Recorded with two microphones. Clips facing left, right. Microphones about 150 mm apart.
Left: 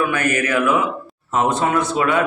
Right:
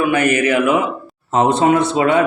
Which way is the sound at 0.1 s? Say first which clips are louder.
Right 5 dB; 20° right (ahead or behind).